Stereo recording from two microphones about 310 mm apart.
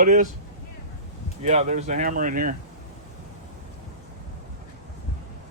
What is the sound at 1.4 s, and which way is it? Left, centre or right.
Speech, right.